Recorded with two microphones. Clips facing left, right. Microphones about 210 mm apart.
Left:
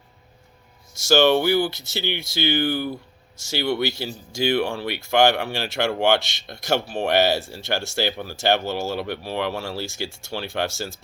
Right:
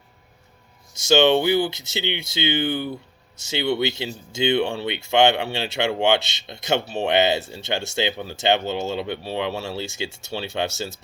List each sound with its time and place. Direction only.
0.9 s speech: 20° right (ahead or behind)